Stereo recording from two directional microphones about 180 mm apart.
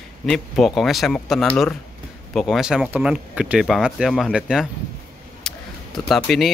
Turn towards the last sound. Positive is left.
turn(degrees=0)  # may be behind; listen again after turning